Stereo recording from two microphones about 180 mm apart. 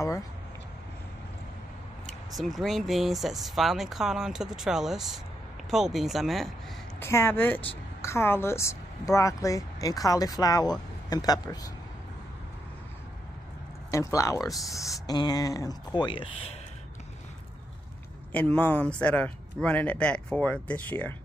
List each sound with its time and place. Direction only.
2.0 s speech: centre (ahead or behind)
7.0 s a woman's voice: 15° left (ahead or behind)
13.8 s speech: 15° left (ahead or behind)
18.3 s a woman's voice: 5° left (ahead or behind)